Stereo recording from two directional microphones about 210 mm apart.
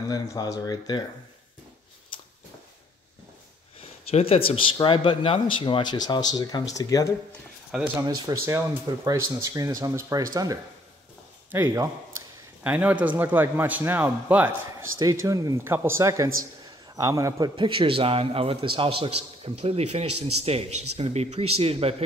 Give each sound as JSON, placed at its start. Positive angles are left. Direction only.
{"t": 0.1, "sound": "speech", "side_deg": 15}
{"t": 3.8, "sound": "a sound", "side_deg": 30}
{"t": 4.5, "sound": "speech", "side_deg": 25}
{"t": 7.7, "sound": "speech", "side_deg": -5}
{"t": 8.1, "sound": "a man's voice", "side_deg": -20}
{"t": 20.1, "sound": "speech", "side_deg": -90}
{"t": 20.4, "sound": "a man's voice", "side_deg": -30}